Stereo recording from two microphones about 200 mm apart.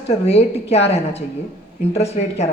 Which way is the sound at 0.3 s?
30° left (ahead or behind).